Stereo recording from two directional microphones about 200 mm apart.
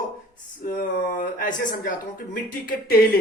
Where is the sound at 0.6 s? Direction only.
45° left (ahead or behind).